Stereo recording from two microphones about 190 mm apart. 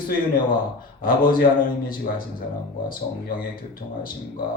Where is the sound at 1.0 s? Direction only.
50° left (ahead or behind).